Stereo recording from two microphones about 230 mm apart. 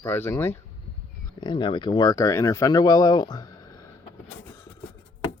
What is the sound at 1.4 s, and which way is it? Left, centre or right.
Speech, left.